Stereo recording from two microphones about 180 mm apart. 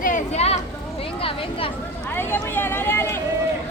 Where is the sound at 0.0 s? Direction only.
40° left (ahead or behind).